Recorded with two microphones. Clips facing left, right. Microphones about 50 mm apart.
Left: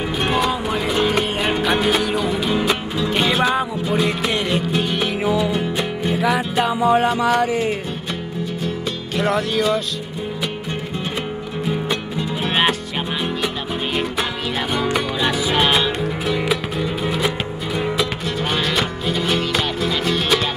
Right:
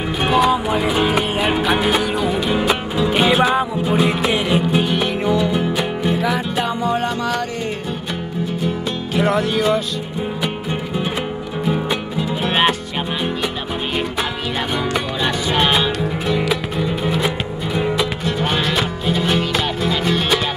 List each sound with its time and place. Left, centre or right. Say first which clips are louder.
0.2 s music: right 5 dB; centre
9.1 s music: right 2 dB; centre
11.7 s music: right 1 dB; centre
14.8 s music: left 2 dB; centre